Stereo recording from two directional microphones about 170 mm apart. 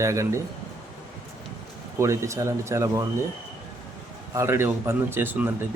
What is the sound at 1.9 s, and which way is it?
A man's voice, 15° right (ahead or behind).